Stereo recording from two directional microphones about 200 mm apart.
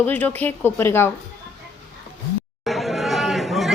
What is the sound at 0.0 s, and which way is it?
Speech, 10° left (ahead or behind).